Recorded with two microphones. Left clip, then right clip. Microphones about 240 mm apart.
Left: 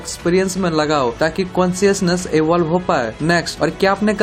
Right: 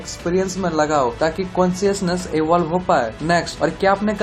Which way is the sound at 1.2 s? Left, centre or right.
Left.